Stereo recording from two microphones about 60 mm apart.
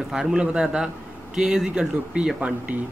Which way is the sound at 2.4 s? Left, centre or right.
Right.